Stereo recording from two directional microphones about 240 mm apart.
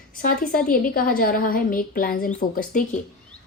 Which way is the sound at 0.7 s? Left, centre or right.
Left.